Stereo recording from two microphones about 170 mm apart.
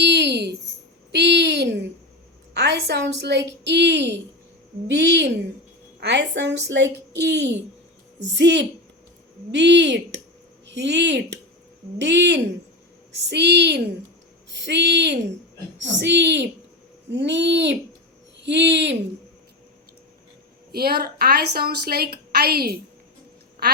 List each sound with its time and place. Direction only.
0.0 s a sound: 90° right
2.6 s a woman's voice: 80° right
20.7 s a woman's voice: 65° right (ahead or behind)